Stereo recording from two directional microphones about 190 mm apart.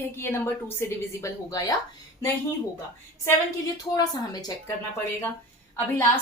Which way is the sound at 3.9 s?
20° left (ahead or behind).